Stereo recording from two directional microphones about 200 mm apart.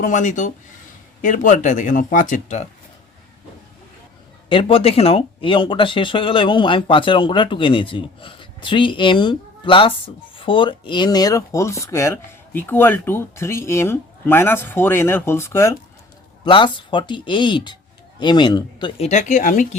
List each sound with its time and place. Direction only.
0.0 s speech: 40° left (ahead or behind)
4.4 s speech: 25° left (ahead or behind)
16.4 s speech: 25° left (ahead or behind); by 19.6 s 40° left (ahead or behind)